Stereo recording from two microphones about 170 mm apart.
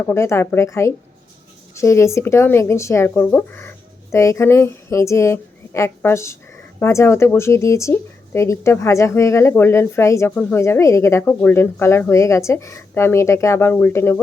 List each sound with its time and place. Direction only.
0.0 s speech: 15° left (ahead or behind)